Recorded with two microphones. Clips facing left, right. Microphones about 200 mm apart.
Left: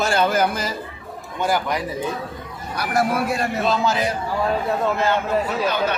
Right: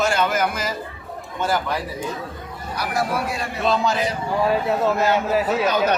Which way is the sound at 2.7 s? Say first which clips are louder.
Left 3 dB; 55° left (ahead or behind).